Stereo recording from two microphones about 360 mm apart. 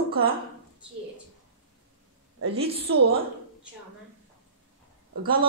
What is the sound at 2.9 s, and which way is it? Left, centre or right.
Speech, right.